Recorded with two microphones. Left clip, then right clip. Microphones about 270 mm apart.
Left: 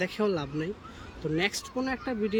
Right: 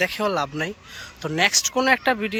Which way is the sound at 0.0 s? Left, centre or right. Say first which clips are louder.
Right 7 dB; centre.